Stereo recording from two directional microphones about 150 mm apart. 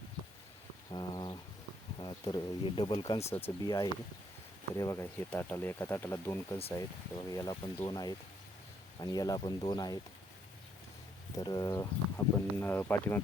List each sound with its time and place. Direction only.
0.9 s bird: 25° left (ahead or behind)
2.0 s speech: 30° left (ahead or behind)
3.2 s speech: 15° left (ahead or behind)
3.6 s speech: 25° left (ahead or behind)
11.3 s speech: 25° left (ahead or behind)